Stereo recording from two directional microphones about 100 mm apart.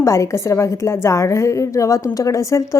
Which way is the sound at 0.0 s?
30° left (ahead or behind).